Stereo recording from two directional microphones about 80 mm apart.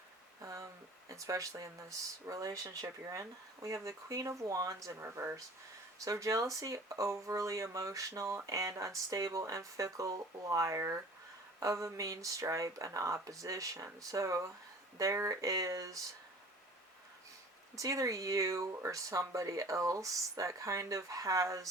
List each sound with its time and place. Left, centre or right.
0.4 s speech: right
4.9 s speech: right
6.1 s speech: right
17.7 s speech: right